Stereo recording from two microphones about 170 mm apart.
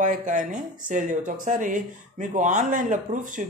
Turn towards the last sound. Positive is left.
turn(degrees=-50)  # may be behind; listen again after turning